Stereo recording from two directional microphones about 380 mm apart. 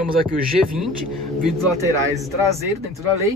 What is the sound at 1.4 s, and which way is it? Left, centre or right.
Speech, centre.